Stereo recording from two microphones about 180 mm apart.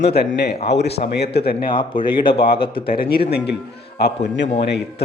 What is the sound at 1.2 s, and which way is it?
Speech, 65° left (ahead or behind).